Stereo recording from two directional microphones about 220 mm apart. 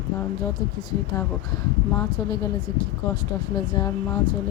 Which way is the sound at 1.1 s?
15° left (ahead or behind).